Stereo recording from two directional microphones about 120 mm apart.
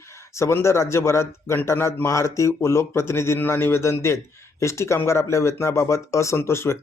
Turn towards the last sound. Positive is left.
turn(degrees=20)  # may be behind; listen again after turning